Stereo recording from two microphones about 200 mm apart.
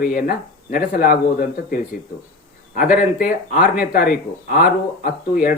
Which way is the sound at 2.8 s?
45° left (ahead or behind).